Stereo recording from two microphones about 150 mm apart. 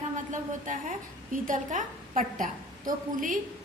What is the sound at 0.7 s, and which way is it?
A woman's voice, 60° right (ahead or behind).